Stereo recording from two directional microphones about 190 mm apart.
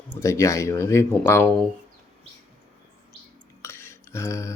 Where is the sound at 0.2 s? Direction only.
15° left (ahead or behind).